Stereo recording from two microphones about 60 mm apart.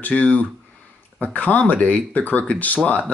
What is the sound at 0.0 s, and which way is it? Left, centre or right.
Speech, left.